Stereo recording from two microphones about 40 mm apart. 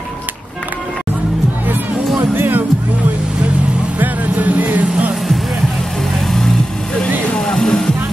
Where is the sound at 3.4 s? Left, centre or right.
Right.